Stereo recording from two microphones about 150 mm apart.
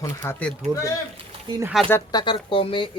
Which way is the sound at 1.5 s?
30° right (ahead or behind).